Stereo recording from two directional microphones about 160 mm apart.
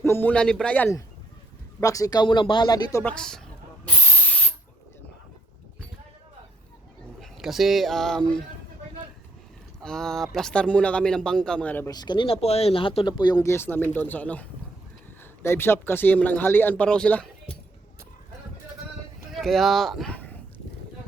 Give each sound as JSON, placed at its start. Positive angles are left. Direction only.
{"t": 0.0, "sound": "a man's voice", "side_deg": 15}
{"t": 1.8, "sound": "speech", "side_deg": 20}
{"t": 3.0, "sound": "speech", "side_deg": 5}
{"t": 7.2, "sound": "speech", "side_deg": 0}
{"t": 9.8, "sound": "speech", "side_deg": 5}
{"t": 11.9, "sound": "speech", "side_deg": 25}
{"t": 15.4, "sound": "speech", "side_deg": 15}
{"t": 19.3, "sound": "speech", "side_deg": 0}
{"t": 20.1, "sound": "a sound", "side_deg": 10}